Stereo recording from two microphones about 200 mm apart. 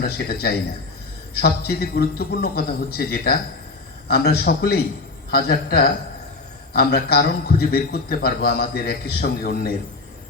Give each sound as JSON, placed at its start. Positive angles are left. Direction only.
{"t": 0.0, "sound": "a man's voice", "side_deg": 50}